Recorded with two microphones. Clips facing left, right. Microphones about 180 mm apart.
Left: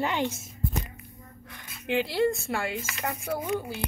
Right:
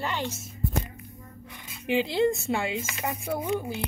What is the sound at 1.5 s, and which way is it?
Speech, 15° right (ahead or behind).